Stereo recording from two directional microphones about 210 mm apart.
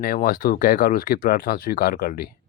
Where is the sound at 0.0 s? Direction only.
45° left (ahead or behind).